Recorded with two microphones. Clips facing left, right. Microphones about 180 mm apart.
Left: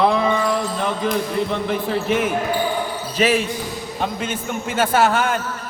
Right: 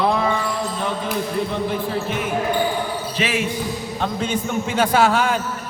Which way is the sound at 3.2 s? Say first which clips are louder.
Left 7 dB; 45° left (ahead or behind).